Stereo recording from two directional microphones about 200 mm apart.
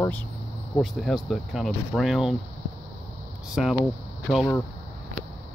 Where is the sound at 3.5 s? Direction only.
Centre (ahead or behind).